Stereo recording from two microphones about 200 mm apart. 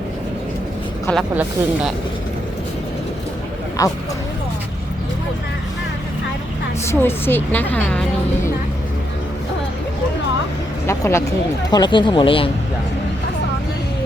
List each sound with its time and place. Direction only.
1.1 s speech: 10° left (ahead or behind)
3.8 s speech: 15° left (ahead or behind)
6.8 s speech: 10° left (ahead or behind)
10.8 s speech: 15° left (ahead or behind)